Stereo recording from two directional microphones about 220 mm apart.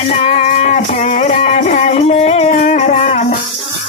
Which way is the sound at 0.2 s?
30° left (ahead or behind).